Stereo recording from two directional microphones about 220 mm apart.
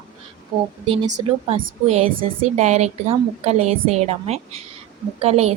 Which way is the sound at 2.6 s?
30° right (ahead or behind).